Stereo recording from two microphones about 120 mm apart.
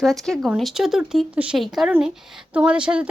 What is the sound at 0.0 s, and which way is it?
A woman's voice, centre (ahead or behind).